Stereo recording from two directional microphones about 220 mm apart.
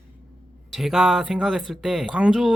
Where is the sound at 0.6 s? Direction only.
Centre (ahead or behind).